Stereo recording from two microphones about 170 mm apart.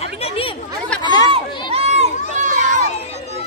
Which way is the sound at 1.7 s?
40° right (ahead or behind).